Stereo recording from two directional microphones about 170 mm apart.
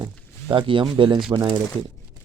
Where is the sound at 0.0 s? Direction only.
30° right (ahead or behind).